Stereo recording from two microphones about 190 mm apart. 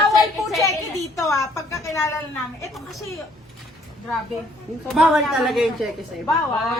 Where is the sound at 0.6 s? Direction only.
15° left (ahead or behind).